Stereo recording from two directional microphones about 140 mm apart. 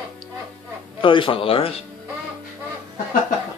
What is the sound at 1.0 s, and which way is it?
Speech, 35° left (ahead or behind).